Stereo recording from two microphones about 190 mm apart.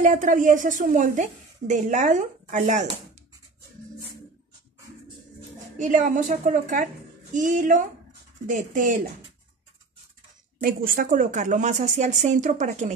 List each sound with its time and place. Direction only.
0.0 s a woman's voice: 45° right (ahead or behind)
5.8 s a woman's voice: 45° right (ahead or behind)
10.6 s a woman's voice: 50° right (ahead or behind)